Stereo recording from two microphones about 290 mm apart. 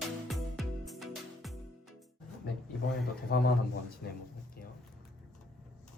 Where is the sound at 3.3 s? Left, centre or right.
Left.